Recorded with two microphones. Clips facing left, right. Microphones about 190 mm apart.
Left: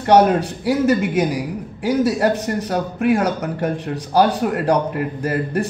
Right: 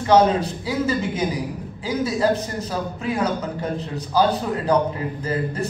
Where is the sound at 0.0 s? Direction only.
70° left (ahead or behind).